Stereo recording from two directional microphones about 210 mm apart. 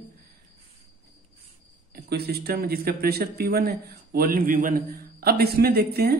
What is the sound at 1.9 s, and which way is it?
Speech, 50° right (ahead or behind).